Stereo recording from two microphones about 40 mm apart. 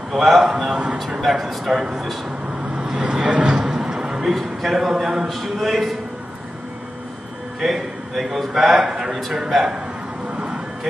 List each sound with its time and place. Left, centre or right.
0.1 s a man's voice: centre
0.5 s a man's voice: centre
1.2 s a man's voice: centre; by 3.5 s right
3.5 s a sound: centre
4.4 s a man's voice: centre
7.6 s a man's voice: centre
8.8 s a man's voice: centre